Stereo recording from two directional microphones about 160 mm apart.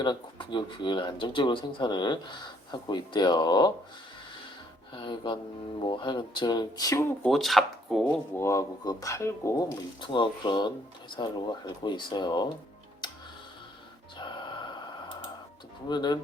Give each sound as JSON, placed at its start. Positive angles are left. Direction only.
{"t": 0.0, "sound": "speech", "side_deg": 30}
{"t": 4.9, "sound": "speech", "side_deg": 30}
{"t": 7.3, "sound": "speech", "side_deg": 0}
{"t": 8.0, "sound": "speech", "side_deg": 15}
{"t": 10.0, "sound": "speech", "side_deg": 30}
{"t": 13.0, "sound": "tick", "side_deg": 25}
{"t": 14.2, "sound": "music", "side_deg": 30}
{"t": 15.9, "sound": "speech", "side_deg": 25}